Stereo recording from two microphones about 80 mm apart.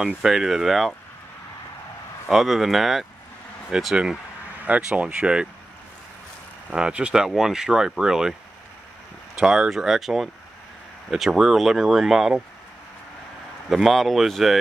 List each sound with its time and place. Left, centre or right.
0.0 s speech: centre
2.2 s speech: centre
6.7 s speech: centre
13.7 s speech: centre